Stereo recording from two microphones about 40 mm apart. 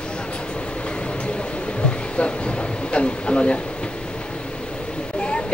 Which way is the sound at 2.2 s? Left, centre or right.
Left.